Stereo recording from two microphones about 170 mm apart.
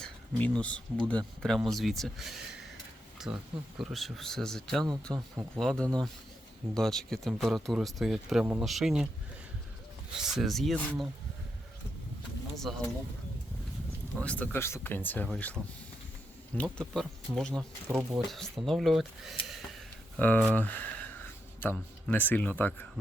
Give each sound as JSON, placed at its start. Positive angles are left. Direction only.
{"t": 0.0, "sound": "a sound", "side_deg": 5}
{"t": 1.0, "sound": "speech", "side_deg": 5}
{"t": 5.1, "sound": "speech", "side_deg": -20}
{"t": 5.5, "sound": "speech", "side_deg": 5}
{"t": 10.2, "sound": "speech", "side_deg": 0}
{"t": 12.5, "sound": "speech", "side_deg": 0}
{"t": 14.2, "sound": "speech", "side_deg": 10}
{"t": 16.6, "sound": "speech", "side_deg": 5}
{"t": 20.1, "sound": "speech", "side_deg": 10}
{"t": 20.5, "sound": "a sound", "side_deg": 10}
{"t": 21.6, "sound": "speech", "side_deg": 10}